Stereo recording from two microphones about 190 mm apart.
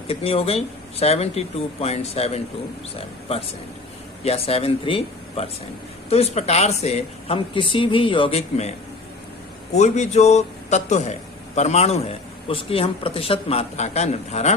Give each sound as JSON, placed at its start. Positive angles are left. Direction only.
{"t": 0.1, "sound": "a man's voice", "side_deg": 30}
{"t": 4.2, "sound": "a man's voice", "side_deg": 30}
{"t": 9.7, "sound": "a man's voice", "side_deg": 35}